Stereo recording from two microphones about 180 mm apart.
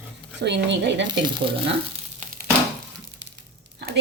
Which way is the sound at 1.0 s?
25° right (ahead or behind).